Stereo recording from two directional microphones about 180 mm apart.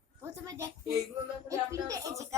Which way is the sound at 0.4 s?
15° right (ahead or behind).